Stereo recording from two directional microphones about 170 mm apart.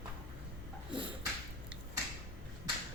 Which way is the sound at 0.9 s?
30° right (ahead or behind).